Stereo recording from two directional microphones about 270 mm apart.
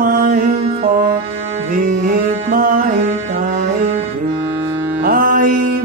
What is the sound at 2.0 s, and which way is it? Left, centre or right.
Music, right.